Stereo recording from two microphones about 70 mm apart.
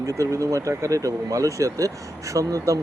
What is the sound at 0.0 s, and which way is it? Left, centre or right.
Speech, right.